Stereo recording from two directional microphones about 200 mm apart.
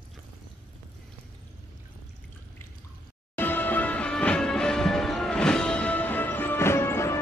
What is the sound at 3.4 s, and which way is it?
Music, 10° left (ahead or behind).